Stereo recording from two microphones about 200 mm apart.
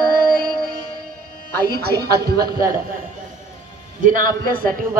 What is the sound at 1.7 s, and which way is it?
A man's voice, 50° right (ahead or behind).